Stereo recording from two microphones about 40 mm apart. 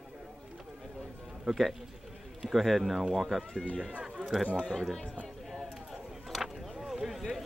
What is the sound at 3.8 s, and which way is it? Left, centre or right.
Speech, right.